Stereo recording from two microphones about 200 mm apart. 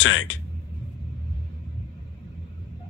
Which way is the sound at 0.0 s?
75° left (ahead or behind).